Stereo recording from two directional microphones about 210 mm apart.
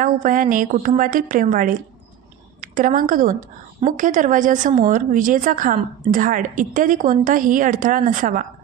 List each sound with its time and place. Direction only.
0.0 s a woman's voice: 40° right (ahead or behind)